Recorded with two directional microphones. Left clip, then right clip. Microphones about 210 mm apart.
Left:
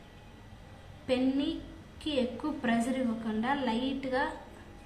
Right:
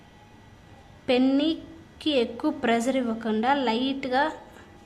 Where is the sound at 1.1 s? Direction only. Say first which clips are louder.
Right 8 dB; 55° right (ahead or behind).